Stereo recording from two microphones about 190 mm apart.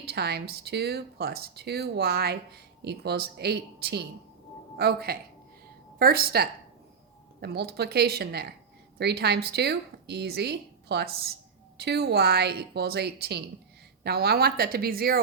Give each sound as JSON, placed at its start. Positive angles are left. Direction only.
{"t": 0.0, "sound": "speech", "side_deg": -55}